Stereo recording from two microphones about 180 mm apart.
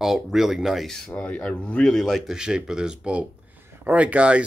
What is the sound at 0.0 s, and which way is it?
Speech, centre (ahead or behind).